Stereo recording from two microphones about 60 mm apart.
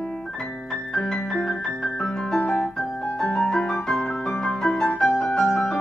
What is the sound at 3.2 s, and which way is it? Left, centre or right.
Music, centre.